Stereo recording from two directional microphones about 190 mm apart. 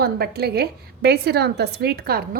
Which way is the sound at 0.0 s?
55° right (ahead or behind).